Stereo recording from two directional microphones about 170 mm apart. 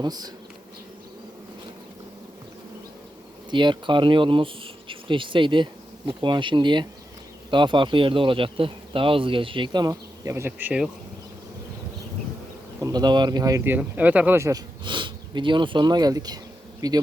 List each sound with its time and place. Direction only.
0.0 s speech: 25° right (ahead or behind)
3.5 s speech: 30° right (ahead or behind); by 10.8 s 10° right (ahead or behind)
12.8 s speech: 25° right (ahead or behind)
13.7 s speech: 10° right (ahead or behind)
14.8 s speech: 30° right (ahead or behind)